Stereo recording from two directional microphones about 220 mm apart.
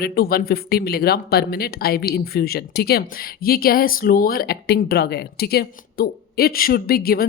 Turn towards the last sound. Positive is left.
turn(degrees=45)  # may be behind; listen again after turning